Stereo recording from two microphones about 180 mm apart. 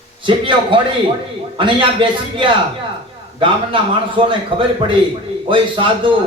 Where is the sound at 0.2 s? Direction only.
30° right (ahead or behind).